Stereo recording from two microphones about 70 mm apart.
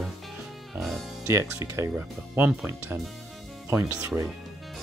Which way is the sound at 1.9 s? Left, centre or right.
Right.